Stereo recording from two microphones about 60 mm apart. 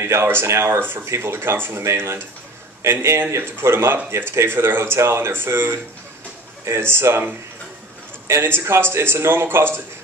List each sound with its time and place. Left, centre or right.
0.0 s speech: right
8.3 s speech: right